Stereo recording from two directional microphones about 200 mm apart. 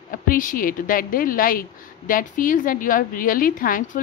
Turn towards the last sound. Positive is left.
turn(degrees=45)  # may be behind; listen again after turning